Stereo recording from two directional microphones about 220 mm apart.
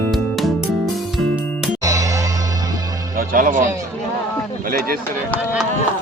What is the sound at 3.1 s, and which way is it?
Music, 40° right (ahead or behind).